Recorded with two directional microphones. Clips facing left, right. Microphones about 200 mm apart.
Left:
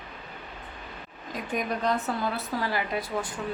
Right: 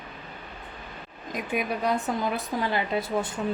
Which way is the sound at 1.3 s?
10° right (ahead or behind).